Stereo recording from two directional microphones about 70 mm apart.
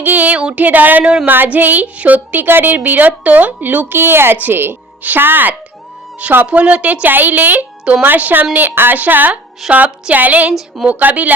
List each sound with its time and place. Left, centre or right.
0.0 s a woman's voice: right